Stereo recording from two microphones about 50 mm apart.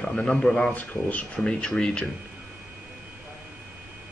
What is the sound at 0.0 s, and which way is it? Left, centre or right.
Speech, centre.